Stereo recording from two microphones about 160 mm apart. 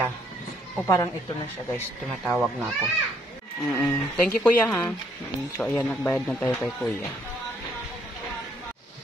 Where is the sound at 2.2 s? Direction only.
5° right (ahead or behind).